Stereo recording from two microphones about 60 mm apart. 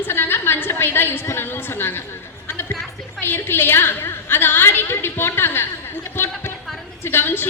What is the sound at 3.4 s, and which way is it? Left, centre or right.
A woman's voice, left.